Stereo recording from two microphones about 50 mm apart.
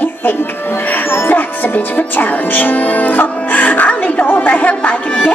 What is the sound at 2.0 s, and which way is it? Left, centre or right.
Speech, left.